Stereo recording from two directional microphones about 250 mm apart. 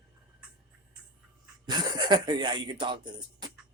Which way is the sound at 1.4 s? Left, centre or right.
Centre.